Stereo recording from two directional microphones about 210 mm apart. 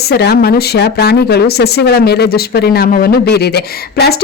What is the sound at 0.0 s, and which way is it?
Speech, 50° left (ahead or behind).